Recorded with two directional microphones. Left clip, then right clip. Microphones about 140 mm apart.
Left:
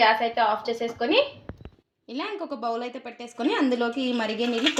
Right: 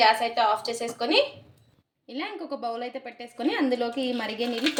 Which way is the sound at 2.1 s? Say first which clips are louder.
Left 2 dB; 50° left (ahead or behind).